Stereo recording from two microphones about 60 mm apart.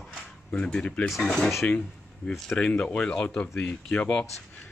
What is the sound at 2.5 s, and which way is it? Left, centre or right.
Speech, left.